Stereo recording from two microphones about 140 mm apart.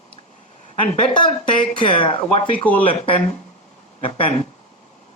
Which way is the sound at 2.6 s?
10° left (ahead or behind).